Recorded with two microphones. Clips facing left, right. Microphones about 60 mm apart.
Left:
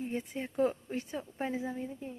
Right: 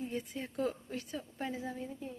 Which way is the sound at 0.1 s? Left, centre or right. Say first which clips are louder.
Left 3 dB; left.